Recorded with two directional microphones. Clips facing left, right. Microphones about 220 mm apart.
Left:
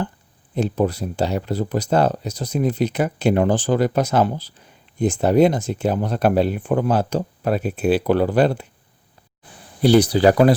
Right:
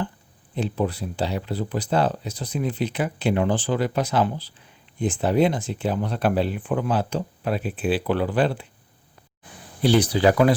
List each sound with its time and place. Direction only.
0.5 s speech: 45° left (ahead or behind)
9.8 s speech: 40° left (ahead or behind)